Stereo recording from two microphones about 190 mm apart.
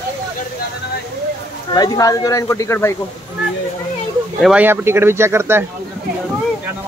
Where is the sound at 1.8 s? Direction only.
20° left (ahead or behind).